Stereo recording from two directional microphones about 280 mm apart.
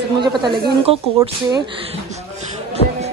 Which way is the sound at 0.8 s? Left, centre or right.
Right.